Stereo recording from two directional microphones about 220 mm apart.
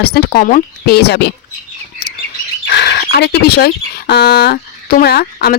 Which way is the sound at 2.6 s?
50° left (ahead or behind).